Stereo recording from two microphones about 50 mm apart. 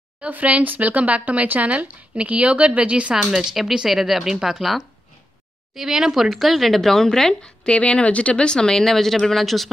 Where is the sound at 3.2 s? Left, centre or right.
Centre.